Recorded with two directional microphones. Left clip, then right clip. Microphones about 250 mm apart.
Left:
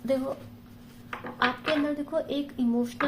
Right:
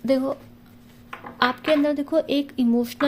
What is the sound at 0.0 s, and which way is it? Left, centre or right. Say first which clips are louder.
Speech: right 6 dB; right.